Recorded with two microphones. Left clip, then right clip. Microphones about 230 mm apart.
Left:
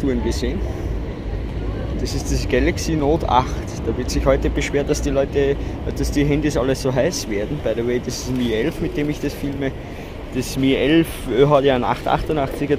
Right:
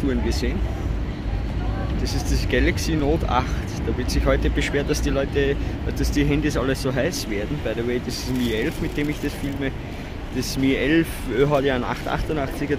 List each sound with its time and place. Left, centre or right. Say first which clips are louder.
0.1 s speech: left 3 dB; centre
2.2 s speech: left 3 dB; centre